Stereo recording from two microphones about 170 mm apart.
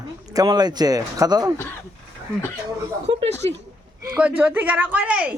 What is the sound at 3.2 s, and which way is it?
Speech, 40° right (ahead or behind).